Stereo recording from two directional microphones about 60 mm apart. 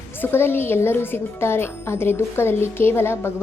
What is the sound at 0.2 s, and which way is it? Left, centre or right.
Speech, left.